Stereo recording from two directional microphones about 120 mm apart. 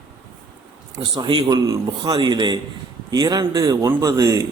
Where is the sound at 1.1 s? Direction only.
40° right (ahead or behind).